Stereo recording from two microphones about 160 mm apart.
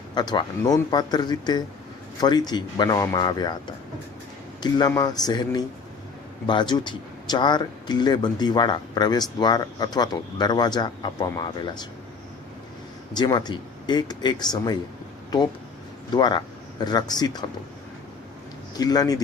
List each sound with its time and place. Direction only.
0.1 s speech: 25° left (ahead or behind)
13.1 s speech: 25° left (ahead or behind)
16.1 s speech: 25° left (ahead or behind)
18.8 s speech: 25° left (ahead or behind)